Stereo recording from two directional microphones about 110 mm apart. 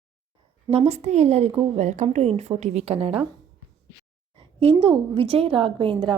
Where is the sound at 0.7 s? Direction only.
75° right (ahead or behind).